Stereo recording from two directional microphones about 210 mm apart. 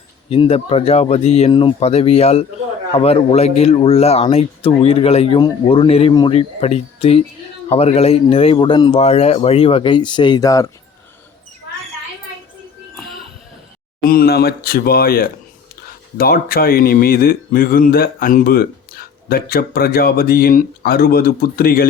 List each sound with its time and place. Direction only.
0.3 s speech: 30° left (ahead or behind)
14.0 s speech: 45° left (ahead or behind)